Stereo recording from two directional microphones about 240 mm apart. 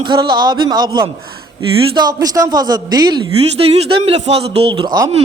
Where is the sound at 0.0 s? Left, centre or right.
Centre.